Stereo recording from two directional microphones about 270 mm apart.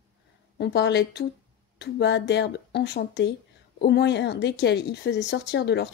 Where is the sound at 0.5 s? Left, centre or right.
Left.